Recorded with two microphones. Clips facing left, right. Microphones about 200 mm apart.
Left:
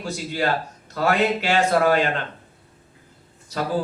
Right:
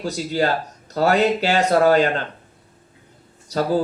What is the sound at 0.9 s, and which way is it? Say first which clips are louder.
A man's voice: right 3 dB; 40° right (ahead or behind).